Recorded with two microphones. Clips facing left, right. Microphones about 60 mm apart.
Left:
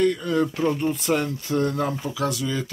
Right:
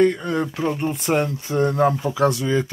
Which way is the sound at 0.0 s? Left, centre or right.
Right.